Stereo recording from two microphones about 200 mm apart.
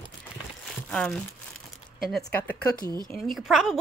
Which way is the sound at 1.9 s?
Centre (ahead or behind).